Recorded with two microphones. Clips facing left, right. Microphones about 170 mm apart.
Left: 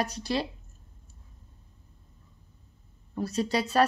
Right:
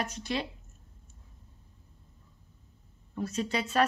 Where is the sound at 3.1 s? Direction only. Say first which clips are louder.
Left 4 dB; 35° left (ahead or behind).